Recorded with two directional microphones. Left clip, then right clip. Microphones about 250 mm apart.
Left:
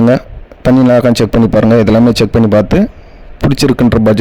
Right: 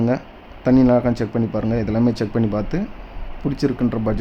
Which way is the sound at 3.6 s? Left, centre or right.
Left.